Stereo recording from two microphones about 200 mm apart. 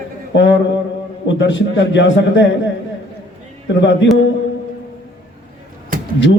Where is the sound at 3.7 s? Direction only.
65° left (ahead or behind).